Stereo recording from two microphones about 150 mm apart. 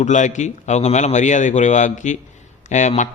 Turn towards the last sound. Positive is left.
turn(degrees=50)  # may be behind; listen again after turning